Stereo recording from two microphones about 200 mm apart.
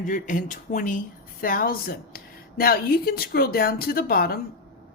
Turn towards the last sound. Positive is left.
turn(degrees=45)  # may be behind; listen again after turning